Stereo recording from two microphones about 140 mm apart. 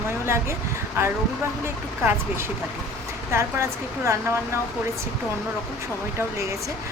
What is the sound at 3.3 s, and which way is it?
Speech, 20° right (ahead or behind).